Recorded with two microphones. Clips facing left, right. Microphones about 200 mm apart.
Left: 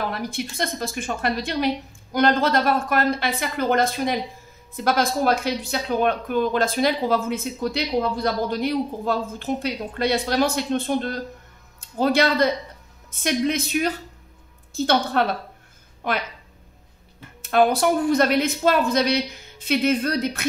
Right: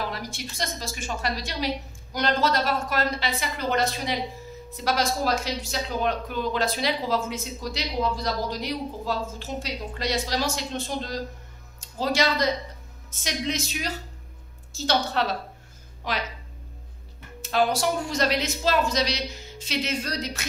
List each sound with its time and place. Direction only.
0.1 s a woman's voice: 55° left (ahead or behind)
17.4 s speech: 55° left (ahead or behind)